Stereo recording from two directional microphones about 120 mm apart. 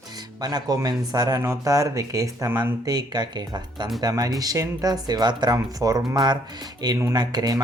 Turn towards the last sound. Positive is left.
turn(degrees=-35)  # may be behind; listen again after turning